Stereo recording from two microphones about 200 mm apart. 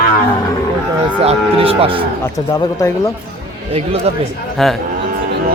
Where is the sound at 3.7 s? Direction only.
30° right (ahead or behind).